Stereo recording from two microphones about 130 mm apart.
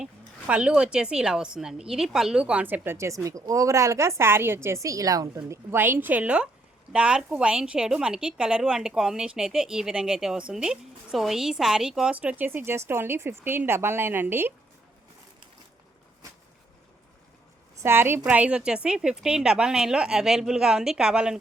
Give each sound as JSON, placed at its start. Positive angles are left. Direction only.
{"t": 0.0, "sound": "a woman's voice", "side_deg": -10}
{"t": 17.8, "sound": "a woman's voice", "side_deg": -15}